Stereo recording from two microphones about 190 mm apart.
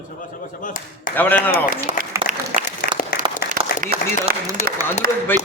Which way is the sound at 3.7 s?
50° left (ahead or behind).